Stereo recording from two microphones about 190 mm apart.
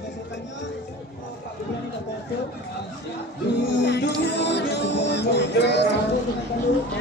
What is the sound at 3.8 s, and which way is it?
Music, 65° left (ahead or behind).